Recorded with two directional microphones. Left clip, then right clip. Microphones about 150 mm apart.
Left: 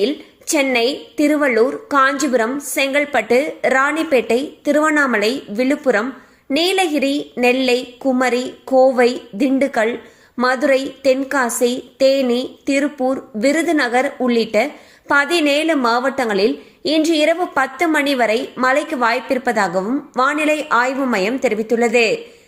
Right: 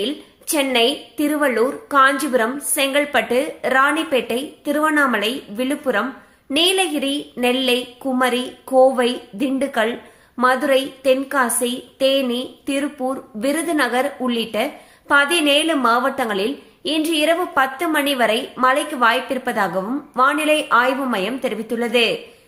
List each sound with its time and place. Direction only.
0.0 s speech: 30° left (ahead or behind)